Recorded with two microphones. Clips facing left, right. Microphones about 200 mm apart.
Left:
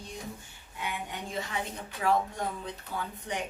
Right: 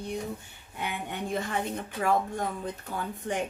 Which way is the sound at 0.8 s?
55° right (ahead or behind).